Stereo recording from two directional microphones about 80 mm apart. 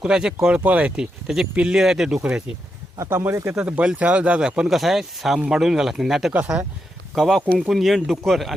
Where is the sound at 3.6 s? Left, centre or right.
Centre.